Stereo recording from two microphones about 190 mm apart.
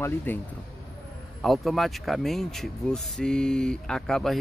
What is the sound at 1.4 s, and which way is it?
Speech, centre (ahead or behind).